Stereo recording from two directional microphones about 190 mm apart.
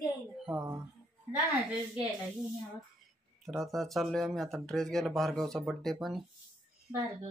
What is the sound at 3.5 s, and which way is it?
Speech, centre (ahead or behind).